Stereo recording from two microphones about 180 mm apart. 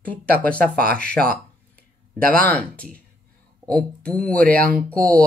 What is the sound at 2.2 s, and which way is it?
Speech, 50° right (ahead or behind).